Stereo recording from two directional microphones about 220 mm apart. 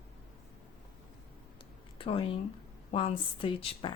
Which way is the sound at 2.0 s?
25° left (ahead or behind).